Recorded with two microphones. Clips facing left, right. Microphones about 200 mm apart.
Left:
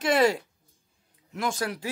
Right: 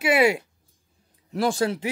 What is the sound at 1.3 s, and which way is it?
Speech, 30° right (ahead or behind).